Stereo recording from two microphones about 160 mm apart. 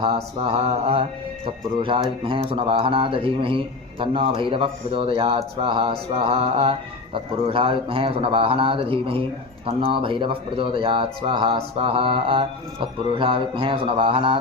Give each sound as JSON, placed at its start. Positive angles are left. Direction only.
{"t": 0.0, "sound": "speech", "side_deg": -35}